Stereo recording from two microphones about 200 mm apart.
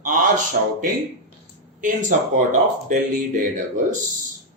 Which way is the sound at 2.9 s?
40° right (ahead or behind).